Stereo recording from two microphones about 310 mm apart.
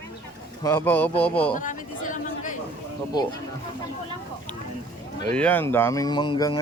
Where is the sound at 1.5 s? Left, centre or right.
Left.